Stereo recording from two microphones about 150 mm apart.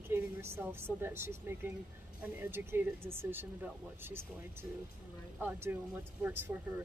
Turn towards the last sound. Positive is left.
turn(degrees=-15)  # may be behind; listen again after turning